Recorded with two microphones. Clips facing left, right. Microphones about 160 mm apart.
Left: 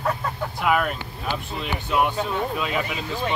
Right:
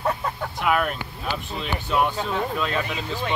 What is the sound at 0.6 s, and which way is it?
Speech, centre (ahead or behind).